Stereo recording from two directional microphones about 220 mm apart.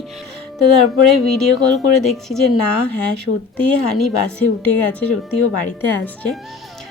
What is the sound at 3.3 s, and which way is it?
Speech, 75° left (ahead or behind).